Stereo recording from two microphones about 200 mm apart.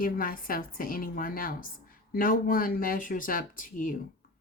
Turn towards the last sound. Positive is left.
turn(degrees=40)  # may be behind; listen again after turning